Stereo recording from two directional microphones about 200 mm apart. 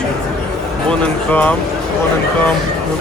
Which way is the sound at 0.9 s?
5° left (ahead or behind).